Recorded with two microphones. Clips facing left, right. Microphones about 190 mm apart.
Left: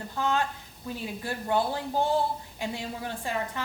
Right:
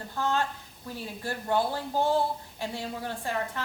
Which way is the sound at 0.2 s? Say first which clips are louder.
Left 1 dB; 15° left (ahead or behind).